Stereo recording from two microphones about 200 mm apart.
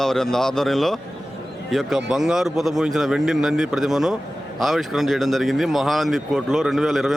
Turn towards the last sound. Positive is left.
turn(degrees=0)  # may be behind; listen again after turning